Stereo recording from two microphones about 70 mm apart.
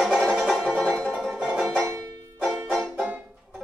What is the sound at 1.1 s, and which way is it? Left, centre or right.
Banjo, centre.